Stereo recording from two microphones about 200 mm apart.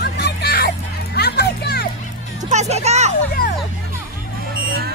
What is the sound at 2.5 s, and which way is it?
Music, 35° right (ahead or behind).